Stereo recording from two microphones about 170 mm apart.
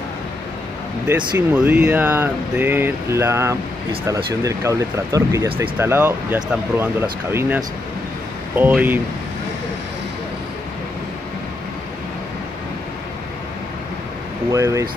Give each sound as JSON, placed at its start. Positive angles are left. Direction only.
{"t": 1.0, "sound": "speech", "side_deg": -5}
{"t": 14.5, "sound": "speech", "side_deg": -20}